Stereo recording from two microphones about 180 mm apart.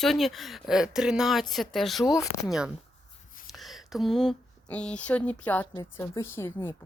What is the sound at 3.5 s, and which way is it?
Speech, centre (ahead or behind).